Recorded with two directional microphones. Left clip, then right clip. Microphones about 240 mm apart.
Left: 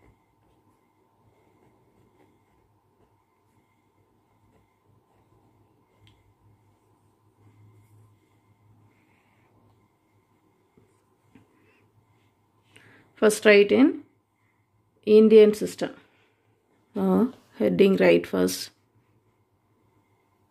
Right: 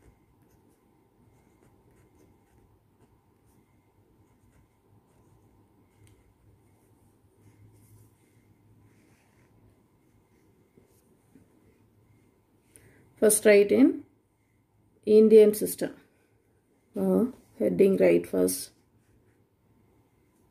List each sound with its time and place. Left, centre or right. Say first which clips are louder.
13.1 s speech: left 2 dB; centre
15.0 s speech: left 2 dB; centre
16.9 s speech: left 2 dB; centre